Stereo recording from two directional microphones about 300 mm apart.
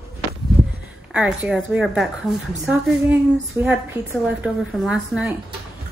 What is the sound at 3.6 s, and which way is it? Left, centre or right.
A woman's voice, centre.